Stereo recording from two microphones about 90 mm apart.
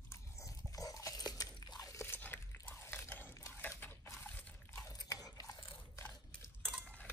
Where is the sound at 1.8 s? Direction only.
35° left (ahead or behind).